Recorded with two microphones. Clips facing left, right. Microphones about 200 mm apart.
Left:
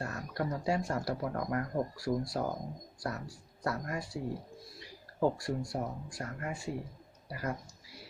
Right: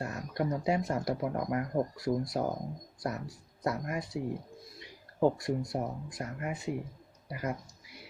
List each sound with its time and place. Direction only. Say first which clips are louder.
0.0 s speech: right 3 dB; 20° right (ahead or behind)
5.4 s speech: right 3 dB; 20° right (ahead or behind)